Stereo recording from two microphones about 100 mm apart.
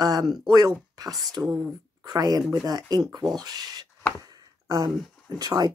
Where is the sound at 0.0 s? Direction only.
40° right (ahead or behind).